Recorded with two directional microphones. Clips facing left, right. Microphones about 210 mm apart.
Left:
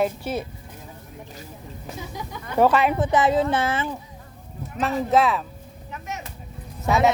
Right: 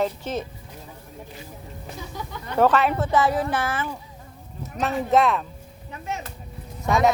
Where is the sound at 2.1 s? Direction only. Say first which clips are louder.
Left 1 dB; 10° left (ahead or behind).